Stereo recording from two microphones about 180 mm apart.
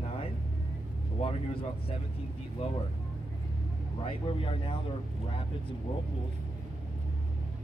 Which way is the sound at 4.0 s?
30° left (ahead or behind).